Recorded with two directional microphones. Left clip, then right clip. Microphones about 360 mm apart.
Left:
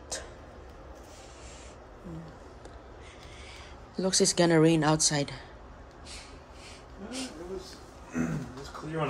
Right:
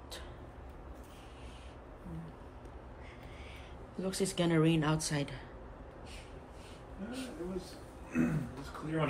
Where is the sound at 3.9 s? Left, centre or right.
Centre.